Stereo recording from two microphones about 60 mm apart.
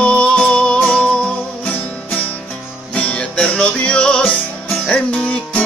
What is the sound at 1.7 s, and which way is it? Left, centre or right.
Music, left.